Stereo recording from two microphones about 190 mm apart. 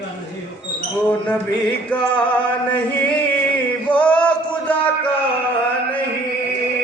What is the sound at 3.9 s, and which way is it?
Male singing, 10° left (ahead or behind).